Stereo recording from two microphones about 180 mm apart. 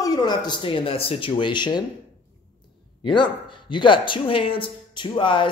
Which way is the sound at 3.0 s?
25° left (ahead or behind).